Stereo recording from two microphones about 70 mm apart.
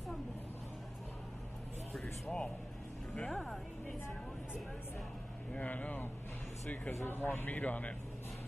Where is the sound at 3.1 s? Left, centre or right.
Centre.